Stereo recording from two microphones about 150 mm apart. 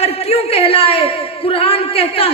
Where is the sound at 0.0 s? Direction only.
40° left (ahead or behind).